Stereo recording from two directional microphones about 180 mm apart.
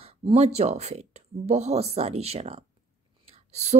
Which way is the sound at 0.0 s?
35° right (ahead or behind).